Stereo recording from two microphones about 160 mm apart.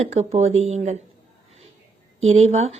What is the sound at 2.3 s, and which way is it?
Speech, 45° right (ahead or behind).